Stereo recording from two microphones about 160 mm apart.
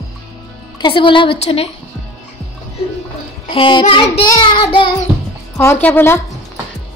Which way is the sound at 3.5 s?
30° left (ahead or behind).